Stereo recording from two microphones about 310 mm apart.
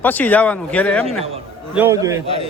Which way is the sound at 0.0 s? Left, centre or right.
Centre.